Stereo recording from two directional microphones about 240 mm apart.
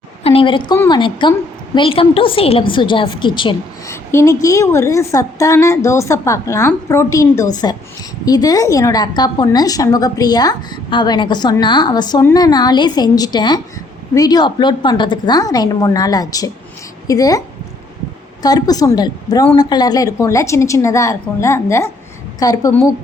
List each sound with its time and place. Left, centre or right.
0.2 s a woman's voice: left
18.4 s a woman's voice: centre